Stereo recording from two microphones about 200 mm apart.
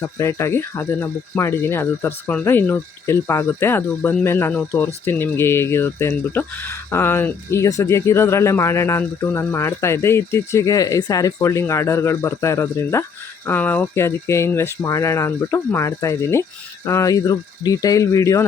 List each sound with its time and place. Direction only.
0.0 s speech: 15° left (ahead or behind)